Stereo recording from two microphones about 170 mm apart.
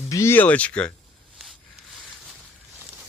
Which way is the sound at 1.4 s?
Centre (ahead or behind).